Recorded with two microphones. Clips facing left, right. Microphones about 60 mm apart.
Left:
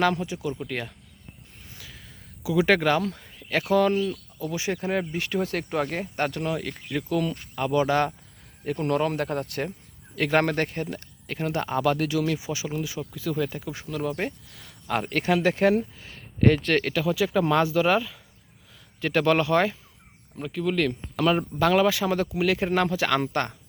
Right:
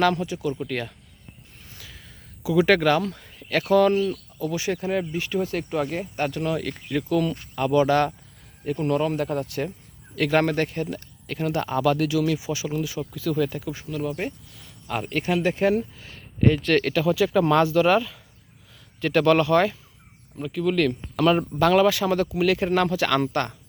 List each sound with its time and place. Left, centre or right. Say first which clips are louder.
0.0 s speech: right 2 dB; centre
1.7 s a sound: even; centre
3.9 s speech: right 3 dB; centre
4.4 s speech: right 2 dB; centre
4.8 s speech: right 1 dB; left
5.2 s speech: right 1 dB; left
6.5 s speech: right 3 dB; centre
8.6 s speech: right 1 dB; left
10.2 s speech: right 2 dB; left
13.7 s speech: left 3 dB; left
16.0 s speech: right 1 dB; left
16.8 s speech: right 3 dB; centre; by 19.7 s left
20.7 s speech: right 3 dB; centre